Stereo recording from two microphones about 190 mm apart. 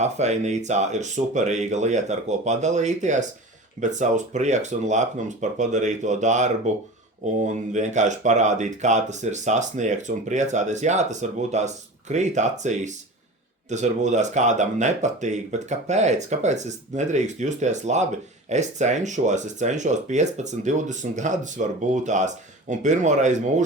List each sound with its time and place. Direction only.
0.0 s speech: 35° right (ahead or behind)